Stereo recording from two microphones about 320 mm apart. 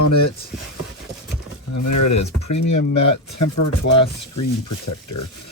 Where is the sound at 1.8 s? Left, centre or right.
Left.